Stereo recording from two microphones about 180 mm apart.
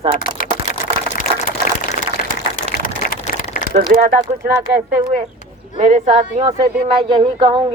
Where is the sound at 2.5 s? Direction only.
50° left (ahead or behind).